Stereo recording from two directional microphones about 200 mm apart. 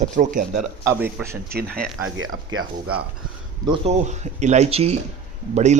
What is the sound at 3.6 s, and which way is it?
Speech, 25° right (ahead or behind).